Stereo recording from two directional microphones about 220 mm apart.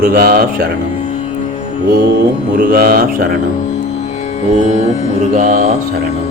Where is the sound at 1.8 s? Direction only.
45° right (ahead or behind).